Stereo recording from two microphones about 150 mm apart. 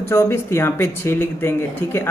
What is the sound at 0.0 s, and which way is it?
Speech, 15° left (ahead or behind).